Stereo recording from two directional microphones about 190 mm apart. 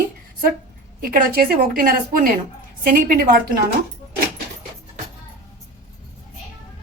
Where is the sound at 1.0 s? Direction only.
50° right (ahead or behind).